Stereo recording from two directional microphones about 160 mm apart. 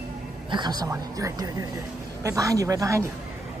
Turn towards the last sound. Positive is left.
turn(degrees=-20)  # may be behind; listen again after turning